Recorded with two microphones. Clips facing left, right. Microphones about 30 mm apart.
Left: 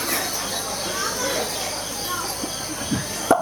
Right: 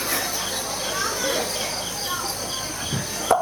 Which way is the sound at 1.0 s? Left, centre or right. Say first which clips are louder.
Even; centre.